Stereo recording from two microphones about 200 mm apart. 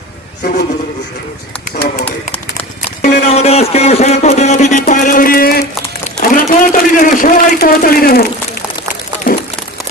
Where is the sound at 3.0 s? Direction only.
35° left (ahead or behind).